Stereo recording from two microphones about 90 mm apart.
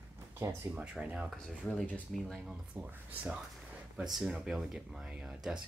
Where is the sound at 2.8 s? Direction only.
20° right (ahead or behind).